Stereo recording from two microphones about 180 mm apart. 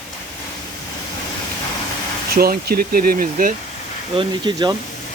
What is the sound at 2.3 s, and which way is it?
Speech, 55° right (ahead or behind).